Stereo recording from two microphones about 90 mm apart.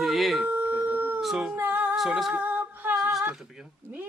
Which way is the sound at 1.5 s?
20° right (ahead or behind).